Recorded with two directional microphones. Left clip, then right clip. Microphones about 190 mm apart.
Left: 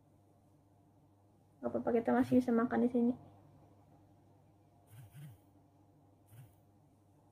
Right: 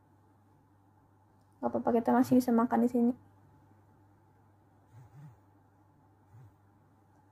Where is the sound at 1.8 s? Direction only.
20° right (ahead or behind).